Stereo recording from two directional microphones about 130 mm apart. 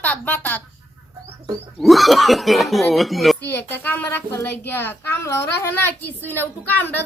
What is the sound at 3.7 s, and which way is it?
A woman's voice, 15° left (ahead or behind).